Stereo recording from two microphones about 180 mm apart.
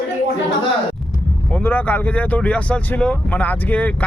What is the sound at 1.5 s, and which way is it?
Speech, 10° left (ahead or behind).